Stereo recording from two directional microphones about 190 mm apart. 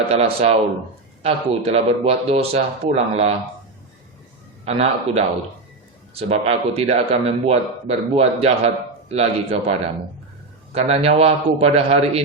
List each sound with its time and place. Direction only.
0.1 s a man's voice: 35° right (ahead or behind)
4.6 s a man's voice: 35° right (ahead or behind)
10.8 s a man's voice: 30° right (ahead or behind)